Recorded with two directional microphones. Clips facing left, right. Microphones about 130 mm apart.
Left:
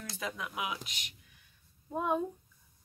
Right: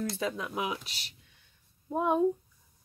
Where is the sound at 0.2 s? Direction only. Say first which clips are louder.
Right 5 dB; 30° right (ahead or behind).